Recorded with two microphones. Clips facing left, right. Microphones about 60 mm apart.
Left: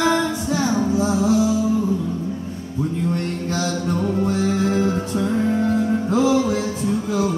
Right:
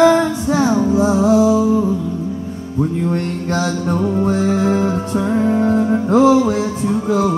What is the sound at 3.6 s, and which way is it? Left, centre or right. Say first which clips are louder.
Music: right 2 dB; right.